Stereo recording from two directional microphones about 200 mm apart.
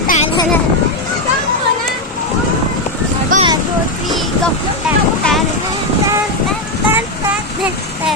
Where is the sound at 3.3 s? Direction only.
40° right (ahead or behind).